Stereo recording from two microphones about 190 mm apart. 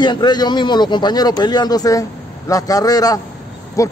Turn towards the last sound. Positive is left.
turn(degrees=15)  # may be behind; listen again after turning